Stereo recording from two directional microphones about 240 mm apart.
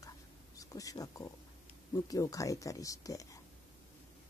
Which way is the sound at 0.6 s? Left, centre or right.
Centre.